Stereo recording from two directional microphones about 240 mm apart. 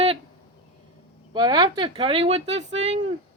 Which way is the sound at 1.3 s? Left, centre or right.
Centre.